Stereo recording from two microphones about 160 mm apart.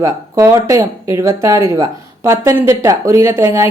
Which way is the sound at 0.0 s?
15° right (ahead or behind).